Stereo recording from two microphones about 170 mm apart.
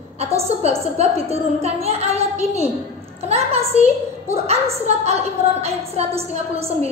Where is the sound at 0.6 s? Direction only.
40° right (ahead or behind).